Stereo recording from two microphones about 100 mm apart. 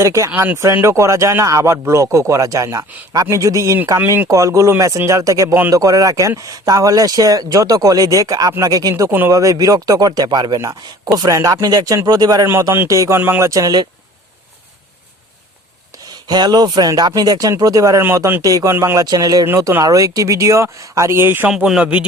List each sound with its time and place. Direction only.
0.0 s speech: 30° right (ahead or behind)
0.3 s speech: 15° right (ahead or behind)
0.5 s speech: 25° right (ahead or behind); by 12.5 s 40° right (ahead or behind)
12.9 s speech: 30° right (ahead or behind)
16.0 s speech: 40° right (ahead or behind); by 21.5 s 20° right (ahead or behind)
21.5 s speech: 5° right (ahead or behind)